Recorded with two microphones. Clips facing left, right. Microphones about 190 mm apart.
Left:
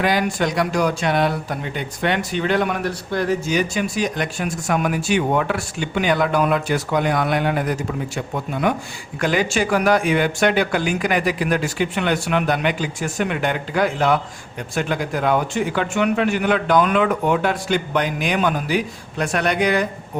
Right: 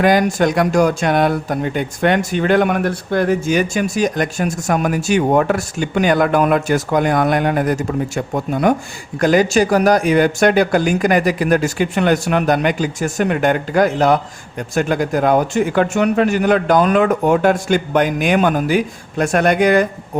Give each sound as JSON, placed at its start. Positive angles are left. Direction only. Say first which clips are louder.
{"t": 0.0, "sound": "speech", "louder": "right 6 dB", "side_deg": -45}